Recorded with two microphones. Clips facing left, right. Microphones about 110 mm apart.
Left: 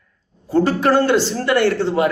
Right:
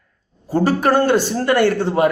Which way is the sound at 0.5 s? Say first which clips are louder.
Left 1 dB; 10° right (ahead or behind).